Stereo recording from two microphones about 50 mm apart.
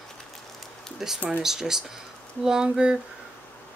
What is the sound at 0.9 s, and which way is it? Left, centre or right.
Speech, centre.